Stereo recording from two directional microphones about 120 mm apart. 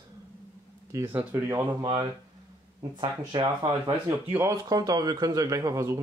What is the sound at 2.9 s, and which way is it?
Speech, 35° right (ahead or behind).